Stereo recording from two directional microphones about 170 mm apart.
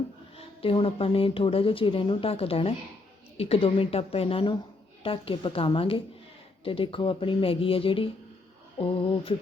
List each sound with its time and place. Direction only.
0.3 s a woman's voice: 35° left (ahead or behind)